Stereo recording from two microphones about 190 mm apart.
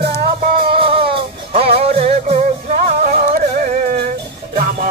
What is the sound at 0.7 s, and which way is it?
Music, 30° right (ahead or behind).